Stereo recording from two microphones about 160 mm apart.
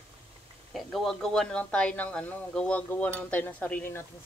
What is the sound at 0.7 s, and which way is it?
Speech, centre (ahead or behind).